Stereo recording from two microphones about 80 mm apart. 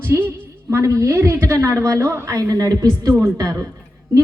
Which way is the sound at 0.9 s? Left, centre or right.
Right.